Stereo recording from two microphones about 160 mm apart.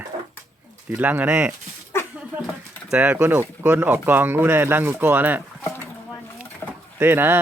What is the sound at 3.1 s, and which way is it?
Speech, 15° right (ahead or behind).